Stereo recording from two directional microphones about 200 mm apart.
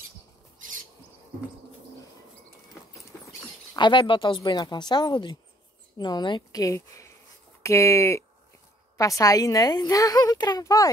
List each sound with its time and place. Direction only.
3.7 s a woman's voice: 25° left (ahead or behind)